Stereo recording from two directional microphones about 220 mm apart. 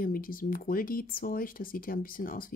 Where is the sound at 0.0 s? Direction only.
40° left (ahead or behind).